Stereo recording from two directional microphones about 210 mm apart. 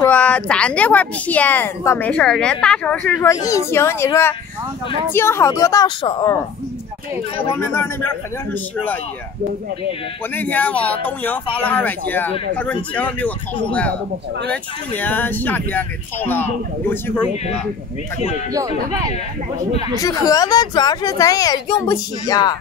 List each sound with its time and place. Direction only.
0.0 s a woman's voice: 5° left (ahead or behind)
7.5 s a woman's voice: 10° left (ahead or behind)
10.3 s a woman's voice: 5° left (ahead or behind)
20.0 s a woman's voice: 15° left (ahead or behind)